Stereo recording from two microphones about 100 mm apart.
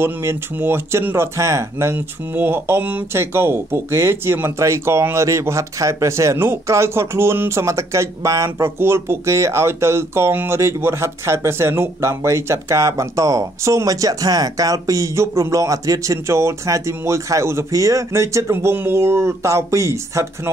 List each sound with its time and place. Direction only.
0.0 s speech: 25° right (ahead or behind)